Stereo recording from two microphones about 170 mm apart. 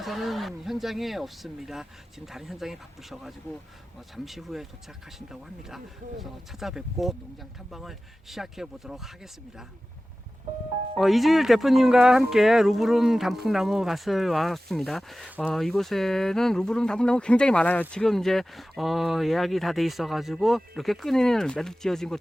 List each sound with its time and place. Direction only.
0.0 s speech: centre (ahead or behind)
10.9 s speech: centre (ahead or behind)